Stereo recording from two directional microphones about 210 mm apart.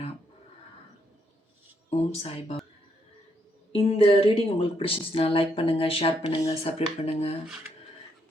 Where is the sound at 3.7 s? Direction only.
25° left (ahead or behind).